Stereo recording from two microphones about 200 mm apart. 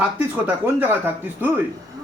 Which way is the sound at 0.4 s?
10° right (ahead or behind).